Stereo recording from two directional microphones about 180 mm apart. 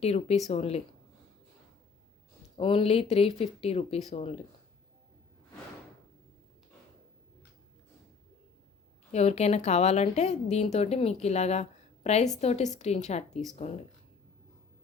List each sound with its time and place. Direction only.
0.0 s a woman's voice: 35° left (ahead or behind)
2.6 s a woman's voice: 30° left (ahead or behind)
9.1 s a woman's voice: 40° left (ahead or behind)